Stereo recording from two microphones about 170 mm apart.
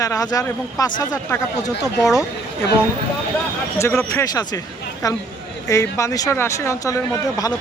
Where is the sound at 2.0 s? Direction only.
20° left (ahead or behind).